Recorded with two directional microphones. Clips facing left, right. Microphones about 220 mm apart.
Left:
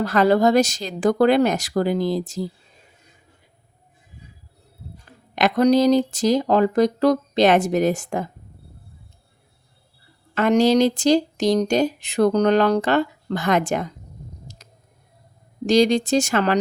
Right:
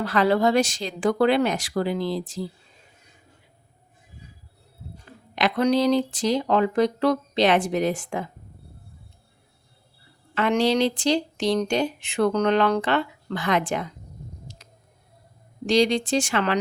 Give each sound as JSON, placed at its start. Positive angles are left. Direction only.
{"t": 0.0, "sound": "speech", "side_deg": 45}
{"t": 5.3, "sound": "speech", "side_deg": 45}
{"t": 10.3, "sound": "speech", "side_deg": 45}
{"t": 14.5, "sound": "a sound", "side_deg": 45}
{"t": 15.6, "sound": "speech", "side_deg": 45}